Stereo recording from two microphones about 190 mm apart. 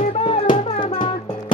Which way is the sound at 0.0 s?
35° left (ahead or behind).